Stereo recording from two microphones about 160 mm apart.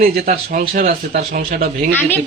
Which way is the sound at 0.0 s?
70° right (ahead or behind).